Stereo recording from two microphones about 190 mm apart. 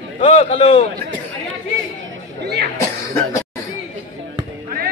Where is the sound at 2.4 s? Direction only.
55° right (ahead or behind).